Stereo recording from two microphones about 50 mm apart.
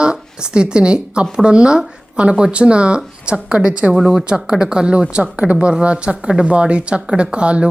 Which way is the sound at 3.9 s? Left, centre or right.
Centre.